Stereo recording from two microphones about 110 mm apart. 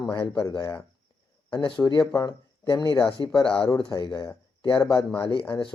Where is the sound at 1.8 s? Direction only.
40° left (ahead or behind).